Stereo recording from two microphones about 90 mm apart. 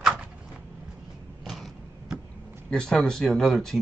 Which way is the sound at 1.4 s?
Centre (ahead or behind).